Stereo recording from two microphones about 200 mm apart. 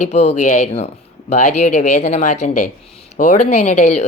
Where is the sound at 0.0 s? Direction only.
35° left (ahead or behind).